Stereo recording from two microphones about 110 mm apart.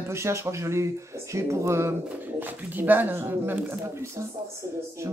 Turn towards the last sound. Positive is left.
turn(degrees=-20)  # may be behind; listen again after turning